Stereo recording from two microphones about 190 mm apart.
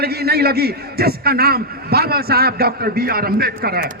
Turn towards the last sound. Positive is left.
turn(degrees=-55)  # may be behind; listen again after turning